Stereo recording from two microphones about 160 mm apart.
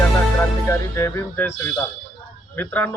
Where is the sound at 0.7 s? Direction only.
15° left (ahead or behind).